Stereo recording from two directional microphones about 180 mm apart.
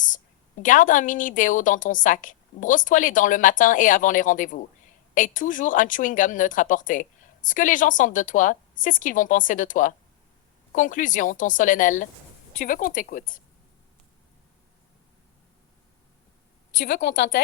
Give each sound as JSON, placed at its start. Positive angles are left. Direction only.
{"t": 0.6, "sound": "speech", "side_deg": 45}
{"t": 16.8, "sound": "a woman's voice", "side_deg": 70}